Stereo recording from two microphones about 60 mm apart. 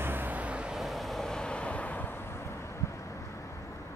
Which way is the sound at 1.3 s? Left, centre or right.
Centre.